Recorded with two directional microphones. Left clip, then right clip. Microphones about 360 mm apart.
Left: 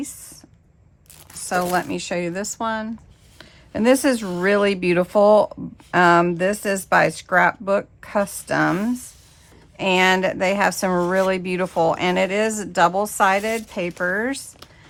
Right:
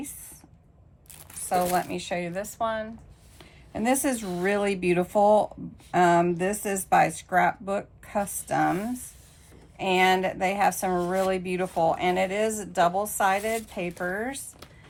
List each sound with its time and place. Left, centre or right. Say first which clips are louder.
1.5 s speech: left 3 dB; left